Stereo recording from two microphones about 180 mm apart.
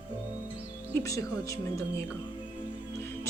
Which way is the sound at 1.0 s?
20° left (ahead or behind).